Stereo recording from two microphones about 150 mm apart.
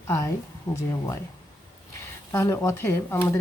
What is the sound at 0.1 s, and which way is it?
Speech, 20° left (ahead or behind).